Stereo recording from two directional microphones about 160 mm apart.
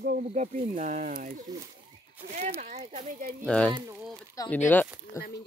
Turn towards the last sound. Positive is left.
turn(degrees=10)  # may be behind; listen again after turning